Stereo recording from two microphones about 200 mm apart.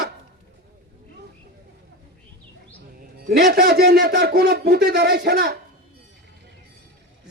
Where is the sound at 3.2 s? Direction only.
50° right (ahead or behind).